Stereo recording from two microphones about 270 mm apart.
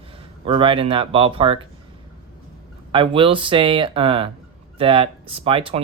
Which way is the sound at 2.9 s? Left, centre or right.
Centre.